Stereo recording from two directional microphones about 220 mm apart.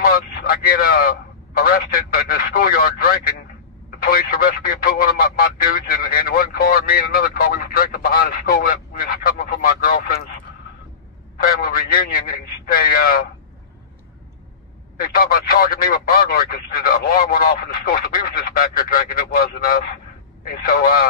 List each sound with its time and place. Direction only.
0.0 s a sound: 40° left (ahead or behind)
1.6 s speech: 40° left (ahead or behind)
11.3 s speech: 45° left (ahead or behind)
15.0 s speech: 45° left (ahead or behind)